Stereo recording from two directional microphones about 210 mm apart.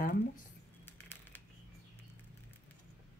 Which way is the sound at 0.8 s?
10° left (ahead or behind).